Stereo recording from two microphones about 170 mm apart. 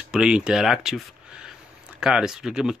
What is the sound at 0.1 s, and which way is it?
Speech, 5° right (ahead or behind).